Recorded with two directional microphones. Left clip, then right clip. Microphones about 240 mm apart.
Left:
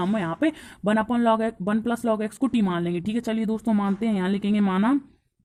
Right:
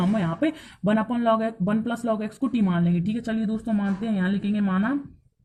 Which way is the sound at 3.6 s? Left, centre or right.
Left.